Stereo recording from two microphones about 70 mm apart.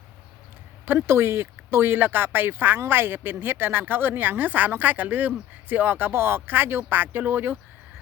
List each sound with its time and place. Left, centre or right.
0.9 s speech: right